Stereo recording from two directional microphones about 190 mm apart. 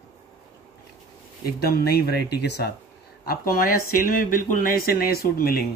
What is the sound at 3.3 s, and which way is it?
A man's voice, 50° left (ahead or behind).